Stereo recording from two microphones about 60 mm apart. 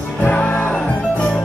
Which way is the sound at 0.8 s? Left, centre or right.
Centre.